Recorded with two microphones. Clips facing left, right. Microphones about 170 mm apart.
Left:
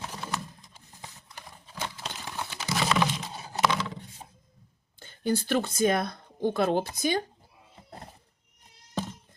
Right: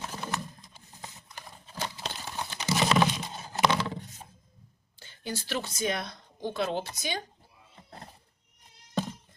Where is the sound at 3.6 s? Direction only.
30° right (ahead or behind).